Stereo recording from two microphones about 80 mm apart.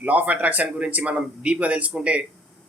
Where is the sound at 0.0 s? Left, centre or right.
Centre.